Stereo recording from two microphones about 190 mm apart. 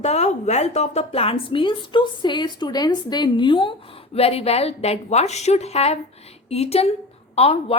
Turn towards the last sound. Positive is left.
turn(degrees=35)  # may be behind; listen again after turning